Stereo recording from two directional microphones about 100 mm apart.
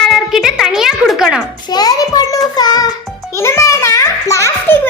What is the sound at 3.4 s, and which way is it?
A child's voice, 30° left (ahead or behind).